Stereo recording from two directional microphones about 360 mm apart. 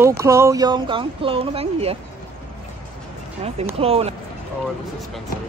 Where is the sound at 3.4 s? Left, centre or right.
Centre.